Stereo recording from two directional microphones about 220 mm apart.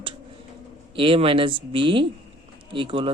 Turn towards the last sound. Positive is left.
turn(degrees=-25)  # may be behind; listen again after turning